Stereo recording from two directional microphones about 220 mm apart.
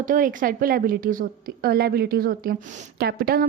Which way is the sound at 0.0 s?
40° right (ahead or behind).